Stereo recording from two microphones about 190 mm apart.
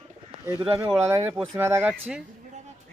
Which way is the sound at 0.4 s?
10° right (ahead or behind).